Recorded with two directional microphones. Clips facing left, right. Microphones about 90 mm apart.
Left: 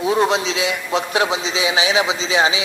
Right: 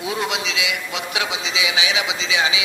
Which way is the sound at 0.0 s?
35° left (ahead or behind).